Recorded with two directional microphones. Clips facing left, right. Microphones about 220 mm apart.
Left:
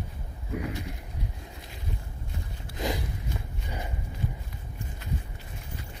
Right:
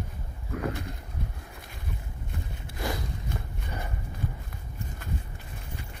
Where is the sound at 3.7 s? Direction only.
15° left (ahead or behind).